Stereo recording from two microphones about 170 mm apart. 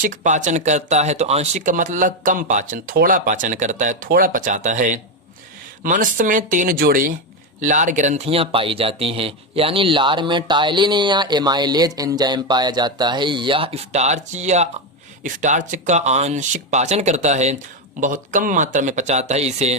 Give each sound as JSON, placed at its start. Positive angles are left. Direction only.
{"t": 0.0, "sound": "speech", "side_deg": -50}